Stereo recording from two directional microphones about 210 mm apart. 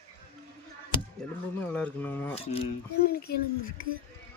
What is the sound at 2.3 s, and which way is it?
Speech, 30° left (ahead or behind).